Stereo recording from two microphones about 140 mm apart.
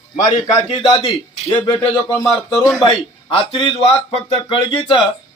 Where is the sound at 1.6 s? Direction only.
35° left (ahead or behind).